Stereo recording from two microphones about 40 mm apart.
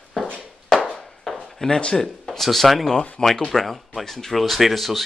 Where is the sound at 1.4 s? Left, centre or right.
Centre.